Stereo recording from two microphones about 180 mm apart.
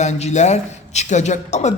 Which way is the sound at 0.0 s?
40° left (ahead or behind).